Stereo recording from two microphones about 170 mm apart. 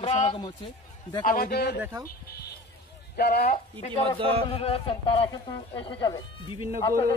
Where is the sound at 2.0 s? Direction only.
65° left (ahead or behind).